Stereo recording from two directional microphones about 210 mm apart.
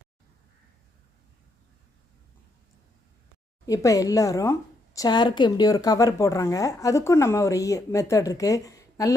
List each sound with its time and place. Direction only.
3.7 s speech: 15° left (ahead or behind)